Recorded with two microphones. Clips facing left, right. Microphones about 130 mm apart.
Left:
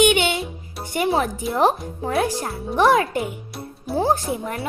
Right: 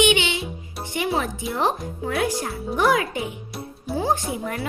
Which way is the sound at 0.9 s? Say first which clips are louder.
Left 4 dB; 35° left (ahead or behind).